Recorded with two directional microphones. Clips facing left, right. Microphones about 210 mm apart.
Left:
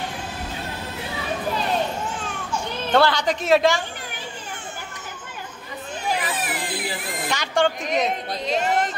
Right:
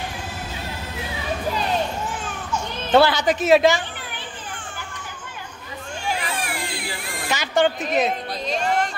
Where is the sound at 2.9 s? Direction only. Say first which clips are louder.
Right 3 dB; 5° right (ahead or behind).